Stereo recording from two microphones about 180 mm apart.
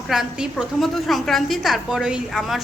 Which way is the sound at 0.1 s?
5° right (ahead or behind).